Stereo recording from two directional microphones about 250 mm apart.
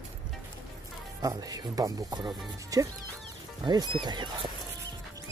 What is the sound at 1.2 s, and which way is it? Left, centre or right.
Speech, centre.